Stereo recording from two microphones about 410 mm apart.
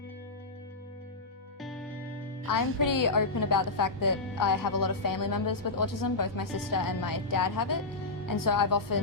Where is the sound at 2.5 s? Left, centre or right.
Left.